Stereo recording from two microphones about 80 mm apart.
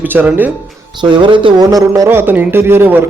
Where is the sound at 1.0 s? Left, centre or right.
Right.